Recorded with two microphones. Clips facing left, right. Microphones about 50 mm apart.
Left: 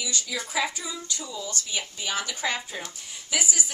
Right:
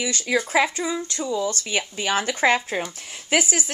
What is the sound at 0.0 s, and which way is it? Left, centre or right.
A woman's voice, right.